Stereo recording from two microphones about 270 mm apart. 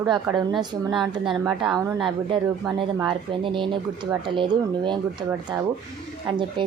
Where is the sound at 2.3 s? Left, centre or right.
Centre.